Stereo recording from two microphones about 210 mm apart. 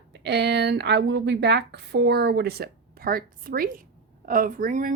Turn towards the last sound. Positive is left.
turn(degrees=-40)  # may be behind; listen again after turning